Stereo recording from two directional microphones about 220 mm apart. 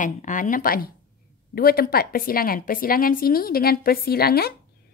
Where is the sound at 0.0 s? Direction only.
35° left (ahead or behind).